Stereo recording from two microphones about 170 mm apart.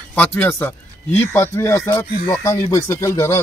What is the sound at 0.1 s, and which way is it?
Speech, 10° left (ahead or behind).